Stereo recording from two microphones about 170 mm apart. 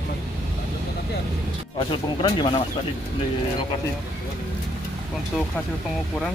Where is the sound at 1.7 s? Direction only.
30° left (ahead or behind).